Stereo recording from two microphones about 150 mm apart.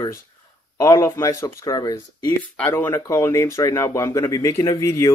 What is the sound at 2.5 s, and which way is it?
Speech, 10° left (ahead or behind).